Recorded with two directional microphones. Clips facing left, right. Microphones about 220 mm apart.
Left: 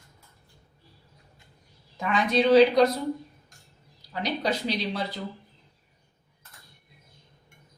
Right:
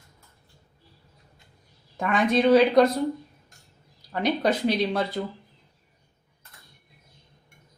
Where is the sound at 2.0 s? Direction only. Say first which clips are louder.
Right 2 dB; 50° right (ahead or behind).